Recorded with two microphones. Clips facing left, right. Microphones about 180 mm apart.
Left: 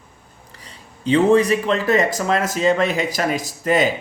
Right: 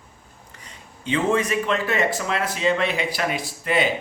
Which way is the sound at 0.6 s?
35° left (ahead or behind).